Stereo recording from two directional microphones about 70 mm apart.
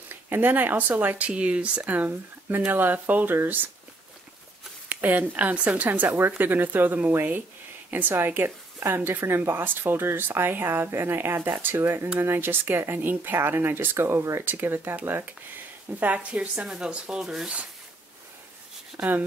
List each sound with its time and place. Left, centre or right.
0.1 s speech: right
4.8 s a woman's voice: right
14.4 s speech: right
16.0 s speech: right; by 17.5 s centre
19.0 s speech: centre